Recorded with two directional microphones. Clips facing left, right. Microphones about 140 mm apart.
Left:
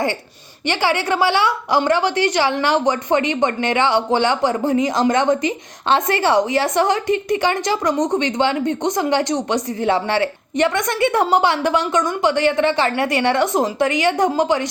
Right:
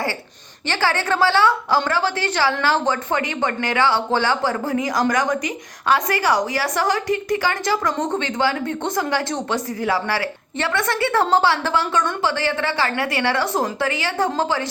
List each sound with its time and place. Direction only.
0.7 s a woman's voice: 15° left (ahead or behind)